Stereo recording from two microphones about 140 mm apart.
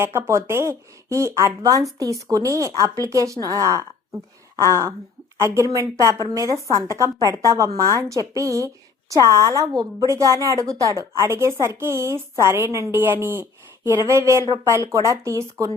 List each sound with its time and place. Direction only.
0.0 s a woman's voice: 15° right (ahead or behind)